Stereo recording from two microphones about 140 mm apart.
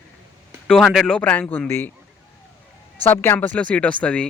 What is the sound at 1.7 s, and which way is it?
Speech, 15° left (ahead or behind).